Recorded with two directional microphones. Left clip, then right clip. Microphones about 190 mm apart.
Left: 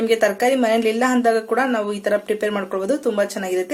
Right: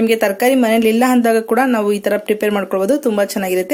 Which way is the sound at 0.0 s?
45° right (ahead or behind).